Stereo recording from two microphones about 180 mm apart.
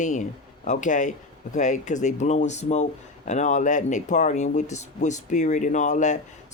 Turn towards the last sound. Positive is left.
turn(degrees=40)  # may be behind; listen again after turning